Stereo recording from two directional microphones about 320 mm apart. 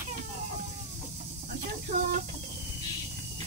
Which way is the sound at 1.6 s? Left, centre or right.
Right.